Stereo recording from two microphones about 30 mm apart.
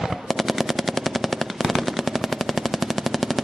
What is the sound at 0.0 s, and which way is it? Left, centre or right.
Machine gun, centre.